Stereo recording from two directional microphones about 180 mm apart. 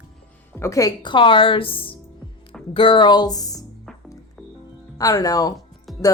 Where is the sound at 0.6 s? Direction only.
15° left (ahead or behind).